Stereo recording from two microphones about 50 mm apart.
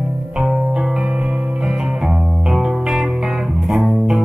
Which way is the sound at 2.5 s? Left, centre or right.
Centre.